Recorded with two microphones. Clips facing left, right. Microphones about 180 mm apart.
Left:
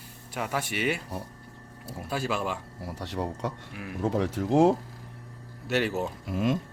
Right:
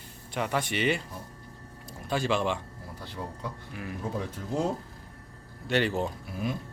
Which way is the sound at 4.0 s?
90° left.